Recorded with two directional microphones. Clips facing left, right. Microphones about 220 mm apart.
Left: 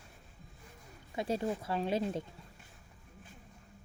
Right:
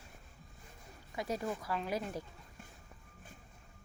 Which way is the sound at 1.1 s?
25° left (ahead or behind).